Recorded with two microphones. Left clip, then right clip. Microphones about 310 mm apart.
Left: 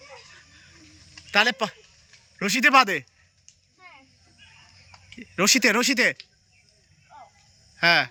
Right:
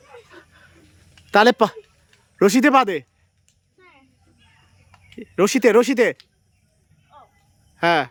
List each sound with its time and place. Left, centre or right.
1.3 s speech: centre
5.0 s speech: centre
7.8 s speech: centre